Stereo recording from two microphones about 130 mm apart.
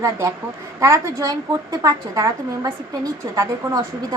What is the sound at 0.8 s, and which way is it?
Speech, 25° right (ahead or behind).